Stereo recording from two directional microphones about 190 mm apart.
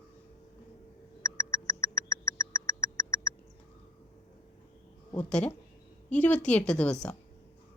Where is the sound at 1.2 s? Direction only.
15° left (ahead or behind).